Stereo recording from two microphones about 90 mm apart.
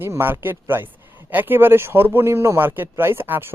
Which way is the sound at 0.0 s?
25° right (ahead or behind).